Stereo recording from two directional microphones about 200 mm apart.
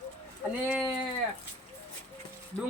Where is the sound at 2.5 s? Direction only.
30° left (ahead or behind).